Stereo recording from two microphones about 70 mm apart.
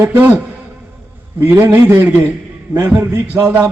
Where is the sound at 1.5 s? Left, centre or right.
Right.